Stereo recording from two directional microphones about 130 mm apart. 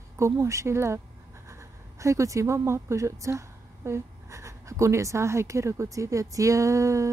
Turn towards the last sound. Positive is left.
turn(degrees=-25)  # may be behind; listen again after turning